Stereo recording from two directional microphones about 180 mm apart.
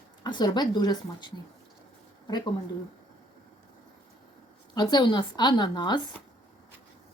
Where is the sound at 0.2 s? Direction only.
25° left (ahead or behind).